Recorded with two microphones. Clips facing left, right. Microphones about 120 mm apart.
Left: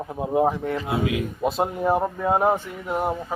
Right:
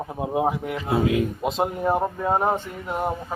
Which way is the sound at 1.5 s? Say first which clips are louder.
Left 2 dB; 5° left (ahead or behind).